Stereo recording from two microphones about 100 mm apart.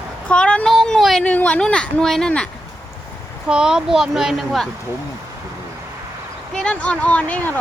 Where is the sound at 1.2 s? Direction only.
15° left (ahead or behind).